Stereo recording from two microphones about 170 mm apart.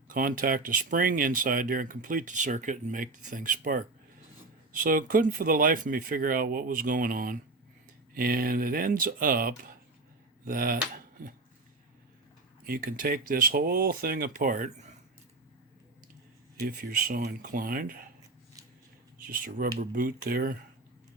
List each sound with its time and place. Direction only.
0.1 s speech: 55° right (ahead or behind)
12.6 s speech: 60° right (ahead or behind)
16.6 s speech: 60° right (ahead or behind)
19.3 s speech: 55° right (ahead or behind)